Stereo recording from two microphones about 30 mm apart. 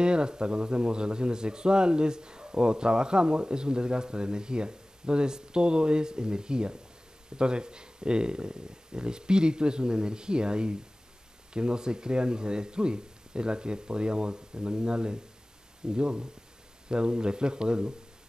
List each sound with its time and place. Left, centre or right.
0.0 s a man's voice: right